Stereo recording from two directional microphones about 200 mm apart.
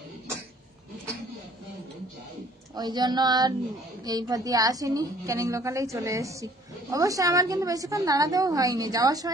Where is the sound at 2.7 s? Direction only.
20° right (ahead or behind).